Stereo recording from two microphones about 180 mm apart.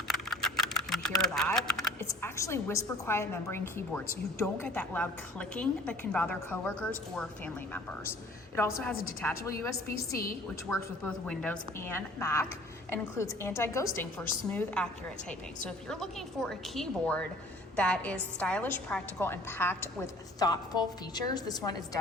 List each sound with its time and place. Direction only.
0.1 s typing: centre (ahead or behind)
1.5 s speech: 5° left (ahead or behind)
2.0 s a woman's voice: 15° left (ahead or behind)
15.9 s a woman's voice: centre (ahead or behind); by 21.8 s 20° left (ahead or behind)